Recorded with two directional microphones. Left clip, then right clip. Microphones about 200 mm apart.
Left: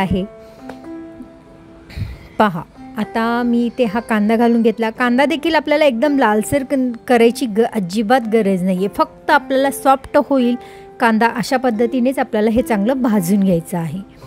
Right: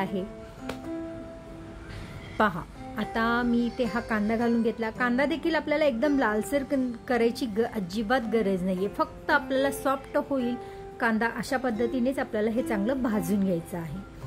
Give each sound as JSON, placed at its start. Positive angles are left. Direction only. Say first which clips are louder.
{"t": 2.3, "sound": "speech", "louder": "left 10 dB", "side_deg": 35}